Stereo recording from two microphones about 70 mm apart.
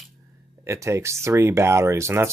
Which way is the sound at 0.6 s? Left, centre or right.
Right.